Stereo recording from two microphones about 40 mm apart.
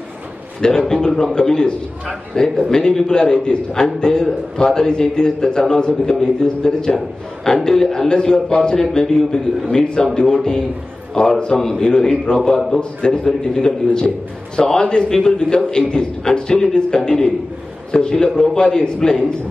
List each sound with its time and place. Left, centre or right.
0.6 s a man's voice: centre
12.4 s a man's voice: centre
13.0 s a man's voice: centre